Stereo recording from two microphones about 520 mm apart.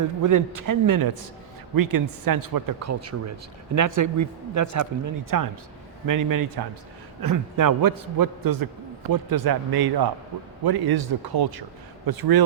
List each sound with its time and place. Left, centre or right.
0.2 s a man's voice: right